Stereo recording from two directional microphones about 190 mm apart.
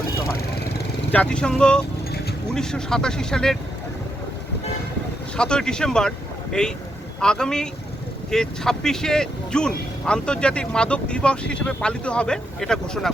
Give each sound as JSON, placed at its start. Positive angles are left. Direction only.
{"t": 1.1, "sound": "speech", "side_deg": 5}
{"t": 5.4, "sound": "speech", "side_deg": 5}